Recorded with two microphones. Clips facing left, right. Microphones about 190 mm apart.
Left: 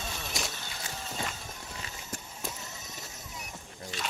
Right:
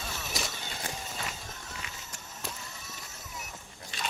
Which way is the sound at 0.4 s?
Centre (ahead or behind).